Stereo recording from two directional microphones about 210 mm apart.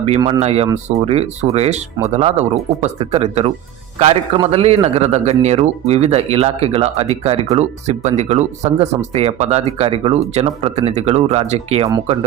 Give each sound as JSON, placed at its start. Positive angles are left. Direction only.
{"t": 0.2, "sound": "a man's voice", "side_deg": -30}